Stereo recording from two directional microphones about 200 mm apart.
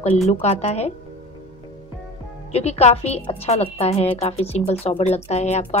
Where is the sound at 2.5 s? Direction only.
30° left (ahead or behind).